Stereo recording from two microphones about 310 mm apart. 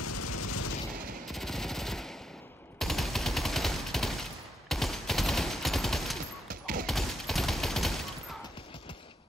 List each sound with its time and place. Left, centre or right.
0.0 s a sound: left
1.3 s machine gun: centre
2.8 s gunshot: centre
6.5 s fusillade: right
6.9 s fusillade: centre